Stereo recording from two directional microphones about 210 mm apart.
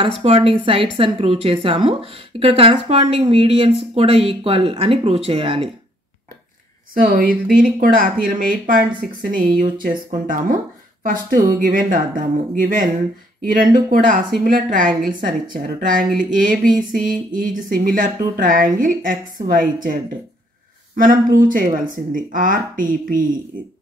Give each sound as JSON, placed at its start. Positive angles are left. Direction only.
{"t": 0.0, "sound": "a woman's voice", "side_deg": -30}
{"t": 6.9, "sound": "a woman's voice", "side_deg": -45}